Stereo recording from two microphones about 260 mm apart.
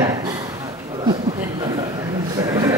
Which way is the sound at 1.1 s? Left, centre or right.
Centre.